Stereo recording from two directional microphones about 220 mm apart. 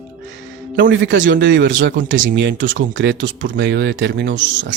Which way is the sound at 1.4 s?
55° right (ahead or behind).